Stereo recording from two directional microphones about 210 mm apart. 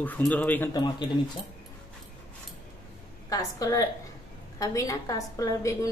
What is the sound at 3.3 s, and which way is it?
A woman's voice, 15° left (ahead or behind).